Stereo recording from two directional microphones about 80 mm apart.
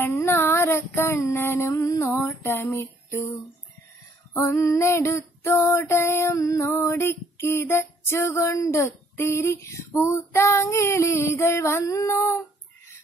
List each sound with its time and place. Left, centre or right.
0.0 s female singing: left
4.4 s female singing: left